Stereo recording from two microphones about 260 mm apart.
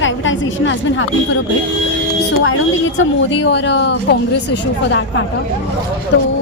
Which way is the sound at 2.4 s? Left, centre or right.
Left.